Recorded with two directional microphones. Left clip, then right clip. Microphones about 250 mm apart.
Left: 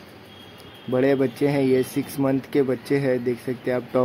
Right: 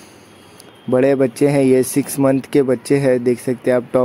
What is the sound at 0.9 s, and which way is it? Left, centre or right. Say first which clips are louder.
Speech: right 6 dB; centre.